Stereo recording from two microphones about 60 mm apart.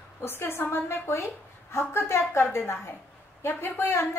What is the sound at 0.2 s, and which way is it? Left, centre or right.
A woman's voice, left.